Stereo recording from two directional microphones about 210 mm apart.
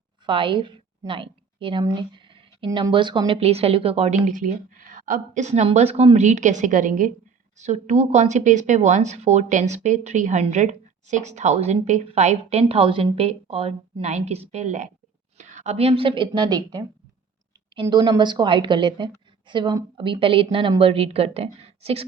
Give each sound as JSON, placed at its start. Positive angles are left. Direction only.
{"t": 0.3, "sound": "a woman's voice", "side_deg": -25}